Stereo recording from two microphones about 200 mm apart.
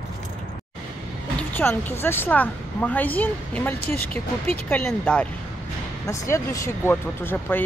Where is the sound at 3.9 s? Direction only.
30° right (ahead or behind).